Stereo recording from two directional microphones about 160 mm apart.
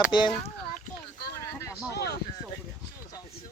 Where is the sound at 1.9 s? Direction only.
80° left.